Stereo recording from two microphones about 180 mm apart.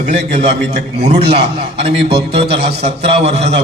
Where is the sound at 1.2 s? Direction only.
65° right (ahead or behind).